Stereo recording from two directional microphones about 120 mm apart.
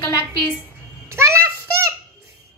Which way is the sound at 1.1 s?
25° right (ahead or behind).